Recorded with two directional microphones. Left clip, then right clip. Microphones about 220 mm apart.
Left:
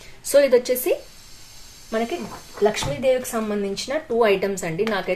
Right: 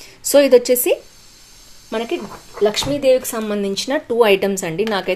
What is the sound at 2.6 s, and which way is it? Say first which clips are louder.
Speech: right 4 dB; 45° right (ahead or behind).